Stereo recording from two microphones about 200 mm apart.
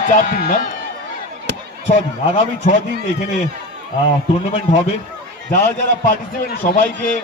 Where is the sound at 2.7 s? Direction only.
40° left (ahead or behind).